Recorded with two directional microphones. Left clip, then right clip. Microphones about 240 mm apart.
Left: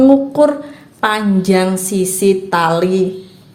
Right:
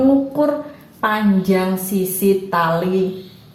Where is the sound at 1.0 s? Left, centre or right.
Left.